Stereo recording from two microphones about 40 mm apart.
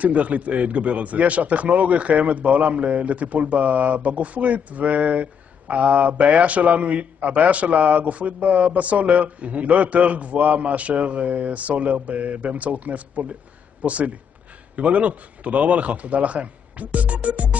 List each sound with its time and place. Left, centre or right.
0.0 s a man's voice: right